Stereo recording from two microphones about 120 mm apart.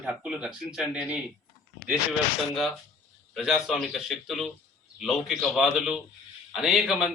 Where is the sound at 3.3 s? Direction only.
Centre (ahead or behind).